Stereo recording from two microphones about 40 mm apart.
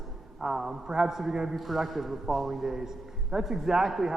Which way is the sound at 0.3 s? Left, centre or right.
Centre.